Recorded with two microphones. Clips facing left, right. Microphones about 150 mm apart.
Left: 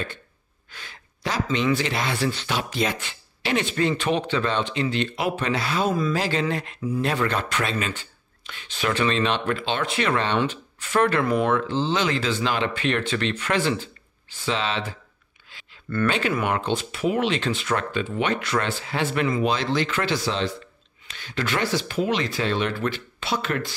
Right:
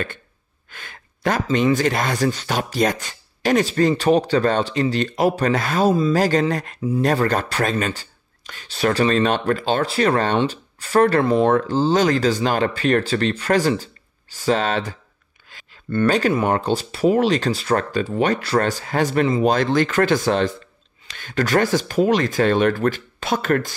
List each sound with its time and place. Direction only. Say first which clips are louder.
0.7 s speech: right 3 dB; 50° right (ahead or behind); by 11.5 s 30° right (ahead or behind)
11.5 s speech: right 6 dB; 40° right (ahead or behind)
15.5 s a sound: right 2 dB; 45° right (ahead or behind)
16.1 s speech: right 6 dB; 40° right (ahead or behind)